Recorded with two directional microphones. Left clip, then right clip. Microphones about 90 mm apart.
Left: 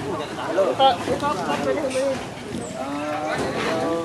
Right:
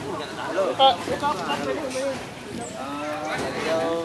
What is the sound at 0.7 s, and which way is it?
Speech, 25° right (ahead or behind).